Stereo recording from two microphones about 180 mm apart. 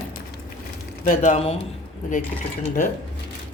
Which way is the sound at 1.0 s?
45° left (ahead or behind).